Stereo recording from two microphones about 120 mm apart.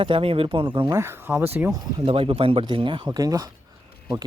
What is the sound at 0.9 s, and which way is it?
Speech, 20° right (ahead or behind).